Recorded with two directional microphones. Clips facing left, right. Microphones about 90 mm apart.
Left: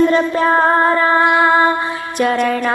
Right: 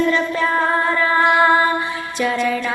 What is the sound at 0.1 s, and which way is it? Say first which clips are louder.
Child singing: left 5 dB; 40° left (ahead or behind).